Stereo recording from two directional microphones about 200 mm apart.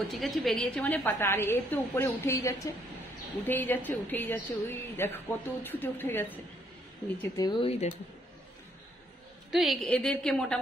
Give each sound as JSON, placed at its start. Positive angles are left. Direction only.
{"t": 0.1, "sound": "a woman's voice", "side_deg": 0}
{"t": 9.5, "sound": "a woman's voice", "side_deg": 0}